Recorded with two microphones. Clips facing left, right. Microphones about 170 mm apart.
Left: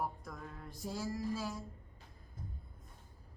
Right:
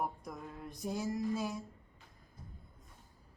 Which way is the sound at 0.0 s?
20° right (ahead or behind).